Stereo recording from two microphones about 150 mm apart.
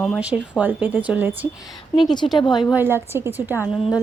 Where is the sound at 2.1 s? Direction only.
30° left (ahead or behind).